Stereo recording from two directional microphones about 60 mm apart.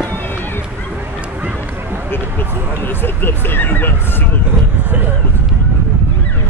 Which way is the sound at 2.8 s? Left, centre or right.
Left.